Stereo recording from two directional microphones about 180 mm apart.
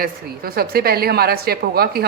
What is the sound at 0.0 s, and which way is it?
A woman's voice, 55° right (ahead or behind).